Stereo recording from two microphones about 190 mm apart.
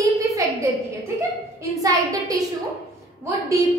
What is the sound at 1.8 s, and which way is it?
Speech, 20° right (ahead or behind).